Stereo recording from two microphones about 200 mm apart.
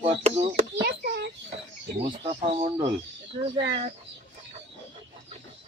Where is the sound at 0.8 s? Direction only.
55° right (ahead or behind).